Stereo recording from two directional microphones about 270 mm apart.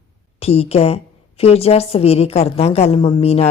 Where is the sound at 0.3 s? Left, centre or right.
Left.